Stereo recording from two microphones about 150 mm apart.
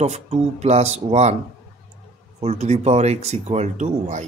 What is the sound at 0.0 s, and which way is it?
Speech, 45° right (ahead or behind).